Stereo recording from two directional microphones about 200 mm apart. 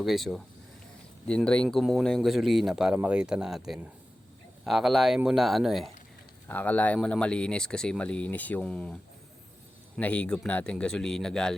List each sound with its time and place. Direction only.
0.0 s speech: centre (ahead or behind)
10.0 s speech: 5° left (ahead or behind)